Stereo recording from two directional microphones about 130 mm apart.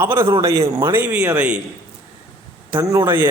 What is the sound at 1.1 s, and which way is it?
Speech, 10° right (ahead or behind).